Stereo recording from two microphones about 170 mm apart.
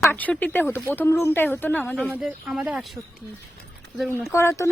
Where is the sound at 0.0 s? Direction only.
10° left (ahead or behind).